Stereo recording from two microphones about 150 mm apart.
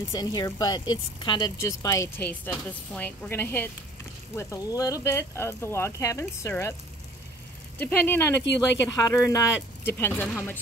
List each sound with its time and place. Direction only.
0.1 s speech: 25° left (ahead or behind)
7.8 s speech: 15° left (ahead or behind)